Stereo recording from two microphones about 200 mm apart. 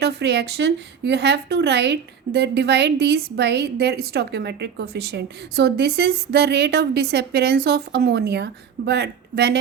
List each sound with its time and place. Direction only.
0.0 s a woman's voice: 55° right (ahead or behind)